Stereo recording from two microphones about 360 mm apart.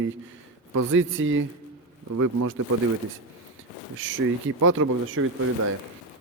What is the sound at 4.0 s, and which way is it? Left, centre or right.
Speech, right.